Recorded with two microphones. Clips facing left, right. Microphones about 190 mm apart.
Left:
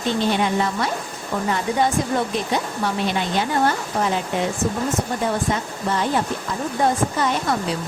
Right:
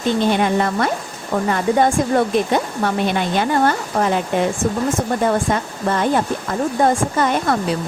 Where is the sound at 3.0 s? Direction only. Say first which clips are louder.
Right 4 dB; 55° right (ahead or behind).